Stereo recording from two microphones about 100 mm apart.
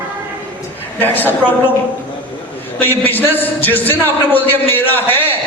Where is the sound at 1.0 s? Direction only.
20° left (ahead or behind).